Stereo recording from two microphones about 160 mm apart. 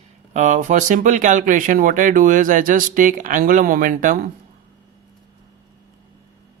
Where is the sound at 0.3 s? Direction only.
50° right (ahead or behind).